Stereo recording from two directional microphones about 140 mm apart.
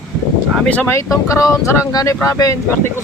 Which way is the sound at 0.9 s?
20° left (ahead or behind).